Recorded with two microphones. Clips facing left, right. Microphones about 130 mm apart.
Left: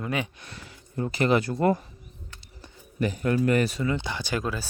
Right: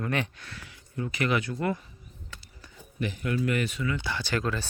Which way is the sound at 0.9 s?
35° left (ahead or behind).